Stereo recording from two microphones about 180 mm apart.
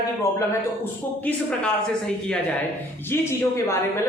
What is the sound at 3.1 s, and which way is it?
Speech, 15° left (ahead or behind).